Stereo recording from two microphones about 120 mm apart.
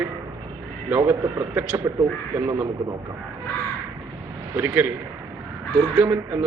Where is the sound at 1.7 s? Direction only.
25° right (ahead or behind).